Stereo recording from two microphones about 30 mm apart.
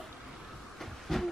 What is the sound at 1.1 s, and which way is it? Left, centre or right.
Hiss, centre.